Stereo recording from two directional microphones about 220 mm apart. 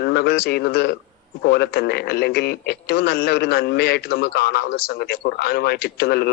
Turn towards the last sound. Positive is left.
turn(degrees=45)  # may be behind; listen again after turning